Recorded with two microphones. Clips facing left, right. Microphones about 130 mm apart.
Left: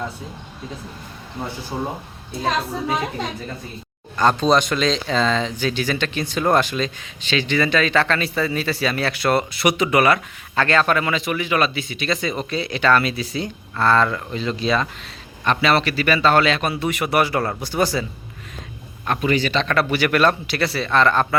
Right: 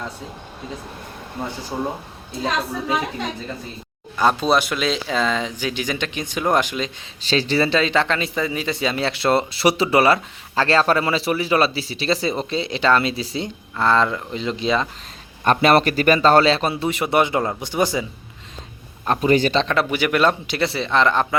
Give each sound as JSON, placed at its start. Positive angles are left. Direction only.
{"t": 4.2, "sound": "speech", "side_deg": -5}
{"t": 7.2, "sound": "speech", "side_deg": -35}
{"t": 15.4, "sound": "speech", "side_deg": -45}
{"t": 19.0, "sound": "speech", "side_deg": -35}
{"t": 19.6, "sound": "speech", "side_deg": -20}